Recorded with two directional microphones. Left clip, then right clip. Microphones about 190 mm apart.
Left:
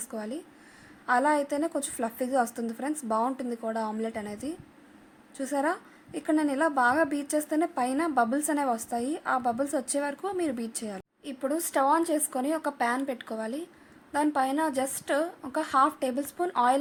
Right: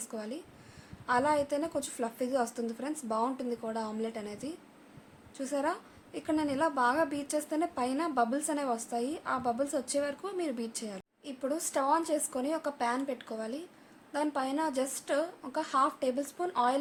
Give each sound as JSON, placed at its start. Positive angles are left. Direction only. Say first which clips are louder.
{"t": 0.0, "sound": "a woman's voice", "louder": "left 4 dB", "side_deg": 20}